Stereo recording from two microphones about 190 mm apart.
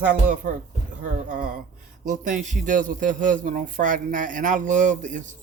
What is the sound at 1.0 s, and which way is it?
Speech, 45° right (ahead or behind).